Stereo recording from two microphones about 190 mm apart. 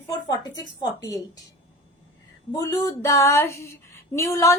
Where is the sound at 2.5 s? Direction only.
20° left (ahead or behind).